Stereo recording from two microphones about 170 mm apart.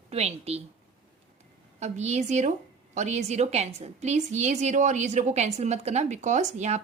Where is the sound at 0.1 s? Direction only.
40° right (ahead or behind).